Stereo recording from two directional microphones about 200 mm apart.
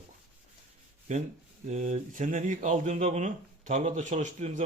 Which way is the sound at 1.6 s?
35° right (ahead or behind).